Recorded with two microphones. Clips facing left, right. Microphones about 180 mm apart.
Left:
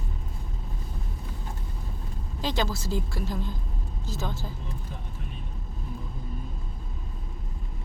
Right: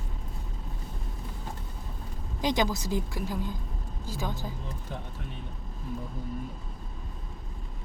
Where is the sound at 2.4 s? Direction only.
15° right (ahead or behind).